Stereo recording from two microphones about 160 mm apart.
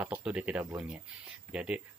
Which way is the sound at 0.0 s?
10° right (ahead or behind).